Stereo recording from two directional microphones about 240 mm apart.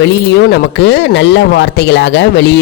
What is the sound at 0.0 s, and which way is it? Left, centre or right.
Speech, left.